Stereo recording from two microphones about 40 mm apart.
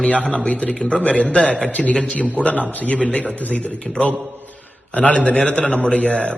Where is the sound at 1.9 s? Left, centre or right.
Left.